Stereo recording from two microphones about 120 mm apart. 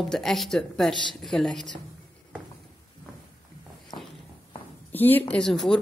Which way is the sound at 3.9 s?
45° left (ahead or behind).